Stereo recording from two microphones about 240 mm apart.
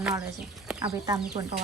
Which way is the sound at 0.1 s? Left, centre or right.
Centre.